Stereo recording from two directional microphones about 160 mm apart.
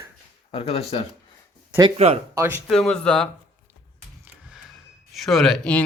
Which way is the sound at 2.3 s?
10° right (ahead or behind).